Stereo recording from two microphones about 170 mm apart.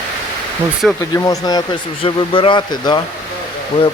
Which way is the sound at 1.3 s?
25° left (ahead or behind).